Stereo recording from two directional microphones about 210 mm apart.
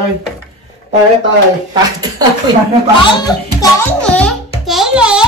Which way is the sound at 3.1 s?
15° left (ahead or behind).